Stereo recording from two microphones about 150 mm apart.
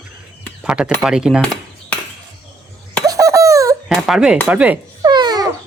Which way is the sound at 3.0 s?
25° right (ahead or behind).